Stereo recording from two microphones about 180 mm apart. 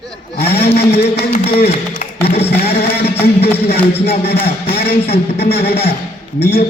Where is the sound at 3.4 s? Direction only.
60° left (ahead or behind).